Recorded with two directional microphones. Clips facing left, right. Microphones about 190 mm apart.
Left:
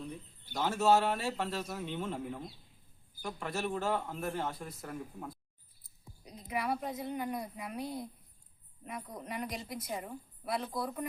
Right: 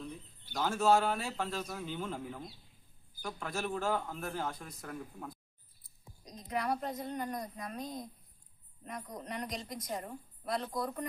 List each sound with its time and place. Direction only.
0.5 s a man's voice: 5° left (ahead or behind)